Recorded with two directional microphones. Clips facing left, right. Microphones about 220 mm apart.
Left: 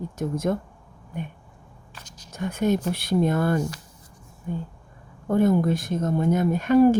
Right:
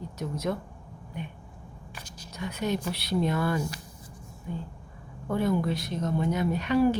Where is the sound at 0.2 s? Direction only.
50° left (ahead or behind).